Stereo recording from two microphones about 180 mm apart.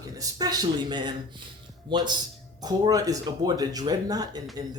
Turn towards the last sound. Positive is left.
turn(degrees=-20)  # may be behind; listen again after turning